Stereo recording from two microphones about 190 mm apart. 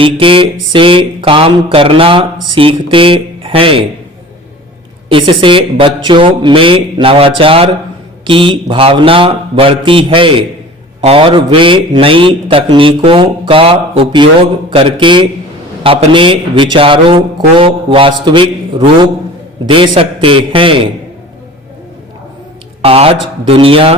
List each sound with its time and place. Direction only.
0.0 s a man's voice: 30° right (ahead or behind)
5.0 s a man's voice: 25° right (ahead or behind)
22.8 s speech: 30° right (ahead or behind)